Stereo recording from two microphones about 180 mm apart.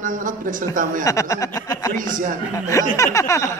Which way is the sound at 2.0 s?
45° right (ahead or behind).